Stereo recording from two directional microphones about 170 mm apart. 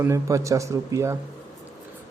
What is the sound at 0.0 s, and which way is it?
Speech, 20° right (ahead or behind).